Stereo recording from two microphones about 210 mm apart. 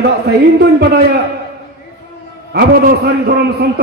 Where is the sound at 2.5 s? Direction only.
45° right (ahead or behind).